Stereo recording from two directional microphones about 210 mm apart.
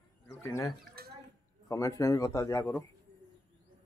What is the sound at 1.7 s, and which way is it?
Speech, 15° left (ahead or behind).